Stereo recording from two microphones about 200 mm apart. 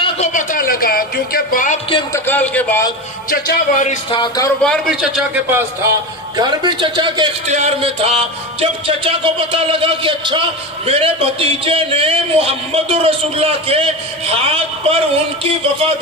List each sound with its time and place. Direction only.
0.0 s speech: 35° left (ahead or behind)
2.1 s a man's voice: 10° left (ahead or behind)
3.3 s a man's voice: 40° left (ahead or behind)
4.1 s speech: 20° left (ahead or behind)
4.6 s a man's voice: centre (ahead or behind); by 7.2 s 25° right (ahead or behind)
7.4 s a man's voice: 35° right (ahead or behind)